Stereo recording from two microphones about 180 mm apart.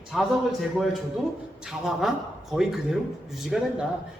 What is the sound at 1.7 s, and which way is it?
A man's voice, 5° right (ahead or behind).